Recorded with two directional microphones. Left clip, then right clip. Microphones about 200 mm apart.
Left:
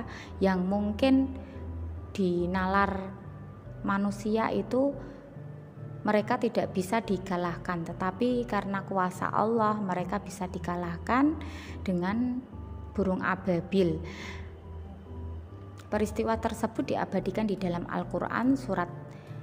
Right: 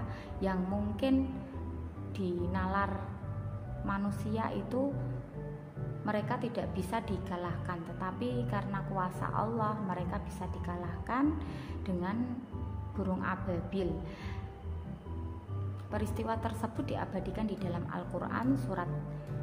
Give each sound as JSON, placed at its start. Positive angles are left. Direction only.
{"t": 0.4, "sound": "a woman's voice", "side_deg": 40}
{"t": 2.1, "sound": "a woman's voice", "side_deg": 40}
{"t": 6.0, "sound": "a woman's voice", "side_deg": 40}
{"t": 15.9, "sound": "a woman's voice", "side_deg": 35}